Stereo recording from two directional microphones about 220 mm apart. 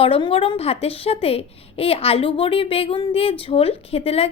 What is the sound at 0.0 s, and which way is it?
A woman's voice, 25° left (ahead or behind).